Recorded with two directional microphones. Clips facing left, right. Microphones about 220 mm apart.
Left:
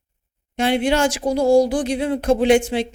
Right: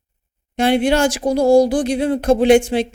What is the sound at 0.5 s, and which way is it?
Speech, 40° right (ahead or behind).